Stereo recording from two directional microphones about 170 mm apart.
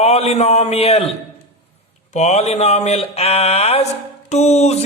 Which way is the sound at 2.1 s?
40° left (ahead or behind).